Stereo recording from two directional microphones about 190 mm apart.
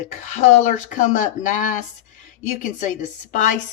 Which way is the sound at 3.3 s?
45° left (ahead or behind).